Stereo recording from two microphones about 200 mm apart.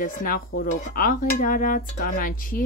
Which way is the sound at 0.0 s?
45° left (ahead or behind).